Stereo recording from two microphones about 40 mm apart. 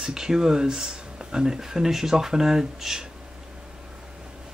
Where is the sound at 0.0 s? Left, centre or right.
Centre.